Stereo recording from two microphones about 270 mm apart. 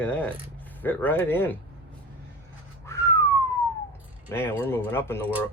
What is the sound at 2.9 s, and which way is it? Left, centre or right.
Whistling, centre.